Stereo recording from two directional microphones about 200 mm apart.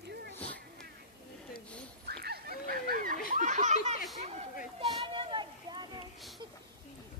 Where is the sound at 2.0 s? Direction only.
55° right (ahead or behind); by 5.8 s 20° right (ahead or behind).